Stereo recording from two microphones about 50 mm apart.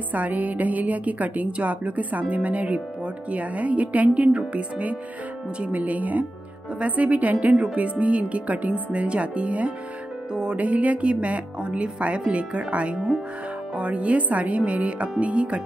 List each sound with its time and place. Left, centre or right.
0.1 s speech: right
10.3 s music: centre
10.6 s speech: right